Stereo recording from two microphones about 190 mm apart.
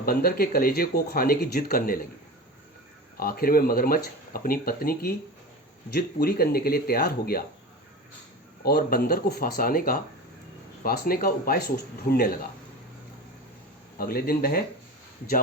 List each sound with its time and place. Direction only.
0.0 s speech: 50° left (ahead or behind)
3.2 s speech: 50° left (ahead or behind)
8.6 s speech: 55° left (ahead or behind)
14.0 s speech: 50° left (ahead or behind)